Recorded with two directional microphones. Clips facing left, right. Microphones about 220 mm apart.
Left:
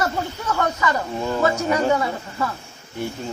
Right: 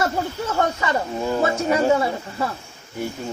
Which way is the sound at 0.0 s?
25° right (ahead or behind).